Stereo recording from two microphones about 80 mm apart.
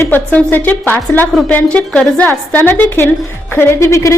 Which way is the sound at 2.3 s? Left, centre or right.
Left.